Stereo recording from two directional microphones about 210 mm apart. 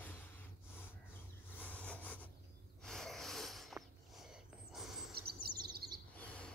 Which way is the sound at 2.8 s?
Centre (ahead or behind).